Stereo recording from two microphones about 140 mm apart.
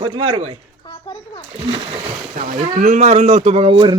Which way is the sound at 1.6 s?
45° right (ahead or behind).